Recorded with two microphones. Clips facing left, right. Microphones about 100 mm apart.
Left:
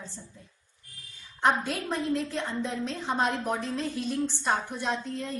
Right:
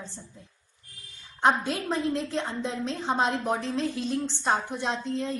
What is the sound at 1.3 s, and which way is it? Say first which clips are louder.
A woman's voice: right 2 dB; 25° right (ahead or behind).